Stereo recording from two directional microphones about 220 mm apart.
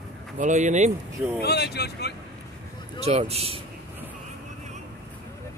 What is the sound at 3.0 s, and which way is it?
Speech, 30° right (ahead or behind).